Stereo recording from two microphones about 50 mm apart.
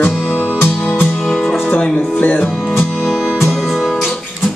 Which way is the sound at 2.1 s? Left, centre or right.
Left.